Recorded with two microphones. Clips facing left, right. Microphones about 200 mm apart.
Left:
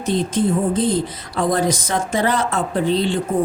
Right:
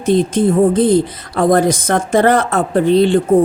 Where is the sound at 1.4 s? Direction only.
55° right (ahead or behind).